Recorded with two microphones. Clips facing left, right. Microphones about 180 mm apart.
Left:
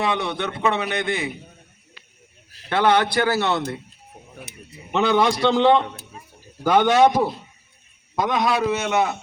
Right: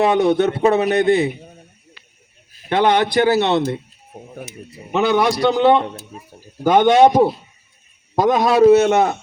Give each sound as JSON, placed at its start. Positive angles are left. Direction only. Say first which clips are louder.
{"t": 0.0, "sound": "a man's voice", "louder": "right 10 dB", "side_deg": -40}
{"t": 2.6, "sound": "speech", "louder": "right 3 dB", "side_deg": -20}
{"t": 4.9, "sound": "a man's voice", "louder": "right 2 dB", "side_deg": -15}